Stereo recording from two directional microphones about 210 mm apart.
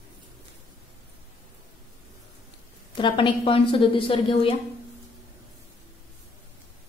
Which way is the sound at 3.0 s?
25° left (ahead or behind).